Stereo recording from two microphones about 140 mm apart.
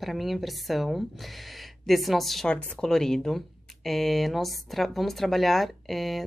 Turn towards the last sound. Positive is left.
turn(degrees=0)  # may be behind; listen again after turning